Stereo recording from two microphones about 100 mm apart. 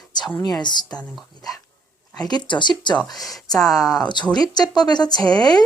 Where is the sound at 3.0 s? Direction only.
40° left (ahead or behind).